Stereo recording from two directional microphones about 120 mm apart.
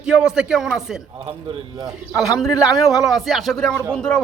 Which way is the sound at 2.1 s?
Centre (ahead or behind).